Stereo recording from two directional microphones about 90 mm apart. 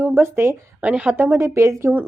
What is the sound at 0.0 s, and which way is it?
Speech, 25° right (ahead or behind).